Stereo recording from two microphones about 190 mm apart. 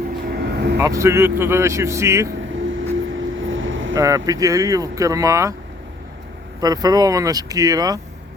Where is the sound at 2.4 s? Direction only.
90° right.